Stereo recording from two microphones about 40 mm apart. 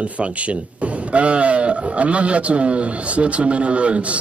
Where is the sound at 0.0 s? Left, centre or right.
Right.